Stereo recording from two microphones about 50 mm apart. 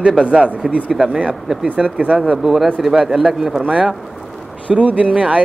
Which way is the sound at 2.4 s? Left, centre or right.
Centre.